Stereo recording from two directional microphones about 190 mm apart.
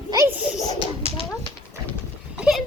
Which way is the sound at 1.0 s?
30° left (ahead or behind).